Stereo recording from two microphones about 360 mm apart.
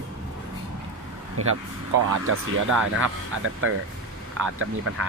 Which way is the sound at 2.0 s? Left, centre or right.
Right.